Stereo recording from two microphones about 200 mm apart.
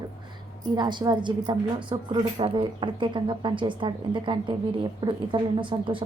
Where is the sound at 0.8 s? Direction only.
20° right (ahead or behind).